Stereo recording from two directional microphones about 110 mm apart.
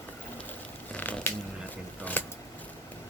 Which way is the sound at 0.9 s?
15° left (ahead or behind).